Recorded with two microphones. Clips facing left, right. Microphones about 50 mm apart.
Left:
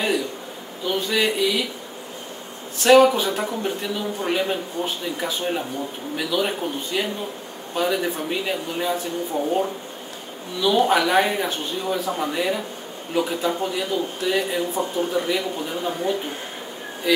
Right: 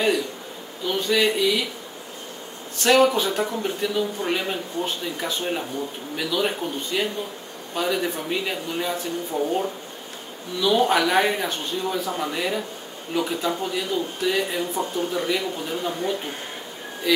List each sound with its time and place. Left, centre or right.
0.8 s speech: centre
2.8 s speech: centre
9.3 s speech: left
10.6 s speech: centre